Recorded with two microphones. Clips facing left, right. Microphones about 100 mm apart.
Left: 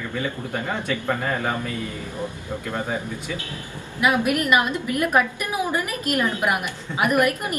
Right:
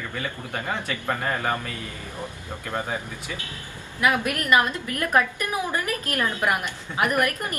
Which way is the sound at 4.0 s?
15° left (ahead or behind).